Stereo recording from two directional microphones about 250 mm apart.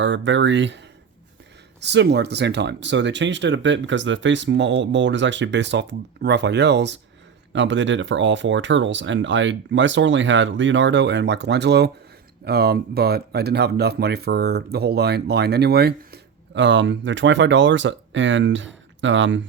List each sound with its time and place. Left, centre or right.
0.3 s speech: right
1.8 s speech: right